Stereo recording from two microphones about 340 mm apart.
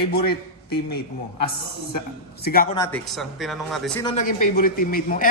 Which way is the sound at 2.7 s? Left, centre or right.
Centre.